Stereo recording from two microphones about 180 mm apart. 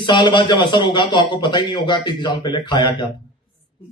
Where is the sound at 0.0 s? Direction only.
25° left (ahead or behind).